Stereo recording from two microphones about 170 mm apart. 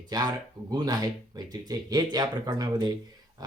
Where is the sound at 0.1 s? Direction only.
25° right (ahead or behind).